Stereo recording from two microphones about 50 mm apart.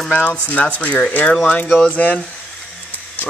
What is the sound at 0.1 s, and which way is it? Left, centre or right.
Speech, left.